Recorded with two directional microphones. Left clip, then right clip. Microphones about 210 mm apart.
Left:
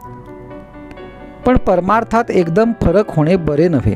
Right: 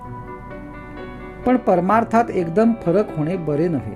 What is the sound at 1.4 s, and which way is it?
Speech, 50° left (ahead or behind).